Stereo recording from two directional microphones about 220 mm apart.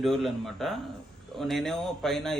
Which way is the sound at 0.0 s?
Centre (ahead or behind).